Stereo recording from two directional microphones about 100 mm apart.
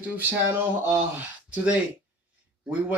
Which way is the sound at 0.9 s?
10° right (ahead or behind).